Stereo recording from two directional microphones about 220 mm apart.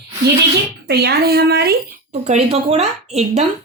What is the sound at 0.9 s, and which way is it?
Speech, 45° right (ahead or behind).